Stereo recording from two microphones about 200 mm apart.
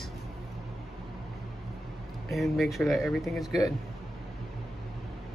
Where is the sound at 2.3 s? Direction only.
Centre (ahead or behind).